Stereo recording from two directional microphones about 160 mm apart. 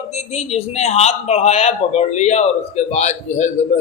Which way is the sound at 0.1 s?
45° left (ahead or behind).